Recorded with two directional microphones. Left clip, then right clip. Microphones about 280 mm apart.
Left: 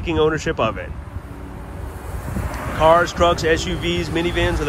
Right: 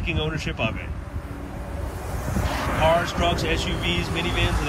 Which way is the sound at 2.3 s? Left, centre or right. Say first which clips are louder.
Right 2 dB; right.